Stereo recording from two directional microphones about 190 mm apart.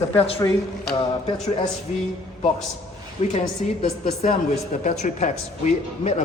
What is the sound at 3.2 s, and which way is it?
A woman's voice, 25° left (ahead or behind).